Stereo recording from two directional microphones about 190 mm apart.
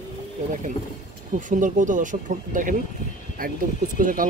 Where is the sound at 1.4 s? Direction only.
45° right (ahead or behind).